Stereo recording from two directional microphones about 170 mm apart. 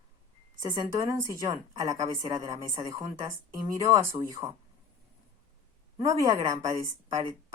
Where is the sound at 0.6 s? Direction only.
20° right (ahead or behind).